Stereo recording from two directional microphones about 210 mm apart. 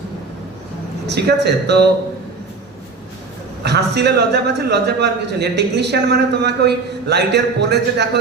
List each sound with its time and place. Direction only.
1.0 s a man's voice: 50° right (ahead or behind)
3.6 s a man's voice: 55° right (ahead or behind)